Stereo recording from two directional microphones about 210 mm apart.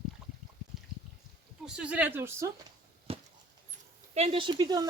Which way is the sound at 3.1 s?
25° right (ahead or behind).